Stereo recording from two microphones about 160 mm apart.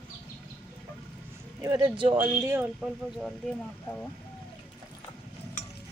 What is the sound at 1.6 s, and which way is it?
Speech, 25° right (ahead or behind).